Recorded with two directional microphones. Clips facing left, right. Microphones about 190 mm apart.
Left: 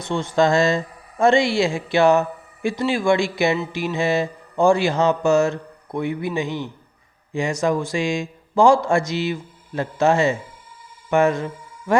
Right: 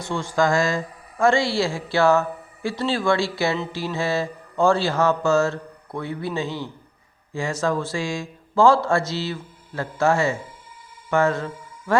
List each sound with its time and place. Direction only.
0.0 s speech: 20° left (ahead or behind)